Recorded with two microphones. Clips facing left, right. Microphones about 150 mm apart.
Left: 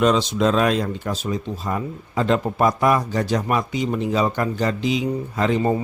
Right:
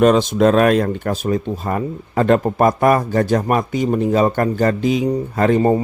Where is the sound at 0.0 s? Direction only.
50° right (ahead or behind).